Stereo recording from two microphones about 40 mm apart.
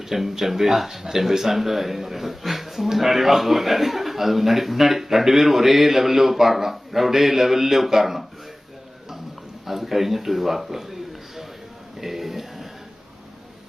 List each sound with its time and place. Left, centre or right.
0.1 s speech: centre
9.6 s speech: centre
11.9 s a sound: centre